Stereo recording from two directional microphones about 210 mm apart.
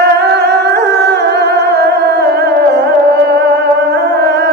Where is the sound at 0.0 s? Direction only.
50° right (ahead or behind).